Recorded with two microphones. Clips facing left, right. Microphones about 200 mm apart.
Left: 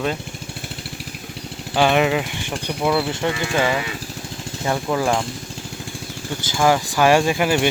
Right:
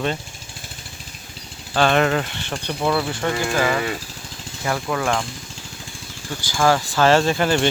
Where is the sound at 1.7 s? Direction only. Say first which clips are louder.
Left 1 dB; 10° left (ahead or behind).